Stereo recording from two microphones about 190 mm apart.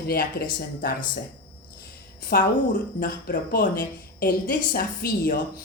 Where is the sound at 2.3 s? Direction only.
50° left (ahead or behind).